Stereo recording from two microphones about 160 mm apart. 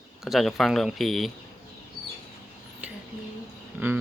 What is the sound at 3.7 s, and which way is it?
Speech, 10° right (ahead or behind).